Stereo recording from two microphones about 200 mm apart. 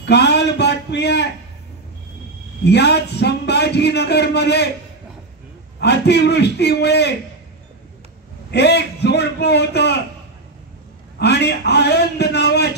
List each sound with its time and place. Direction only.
0.0 s a sound: 55° left (ahead or behind)
2.6 s a man's voice: 55° left (ahead or behind)
5.8 s a man's voice: 55° left (ahead or behind)
8.5 s a man's voice: 55° left (ahead or behind)
11.1 s a man's voice: 55° left (ahead or behind)